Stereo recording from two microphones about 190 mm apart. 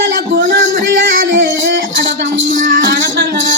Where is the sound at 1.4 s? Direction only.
60° right (ahead or behind).